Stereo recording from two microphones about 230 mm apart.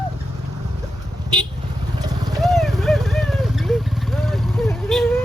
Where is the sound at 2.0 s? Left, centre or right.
Centre.